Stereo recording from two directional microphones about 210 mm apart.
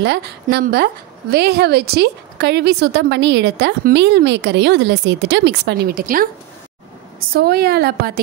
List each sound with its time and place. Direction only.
0.0 s a woman's voice: 50° right (ahead or behind)